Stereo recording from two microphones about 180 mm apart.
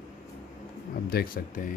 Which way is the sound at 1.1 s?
55° left (ahead or behind).